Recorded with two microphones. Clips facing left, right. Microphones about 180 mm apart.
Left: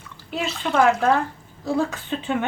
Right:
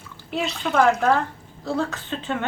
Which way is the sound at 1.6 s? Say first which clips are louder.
Left 2 dB; 10° left (ahead or behind).